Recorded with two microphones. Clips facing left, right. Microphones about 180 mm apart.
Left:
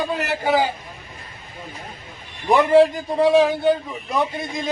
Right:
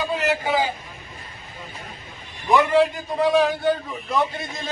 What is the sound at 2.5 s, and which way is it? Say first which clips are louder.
Speech: left 4 dB; 30° left (ahead or behind).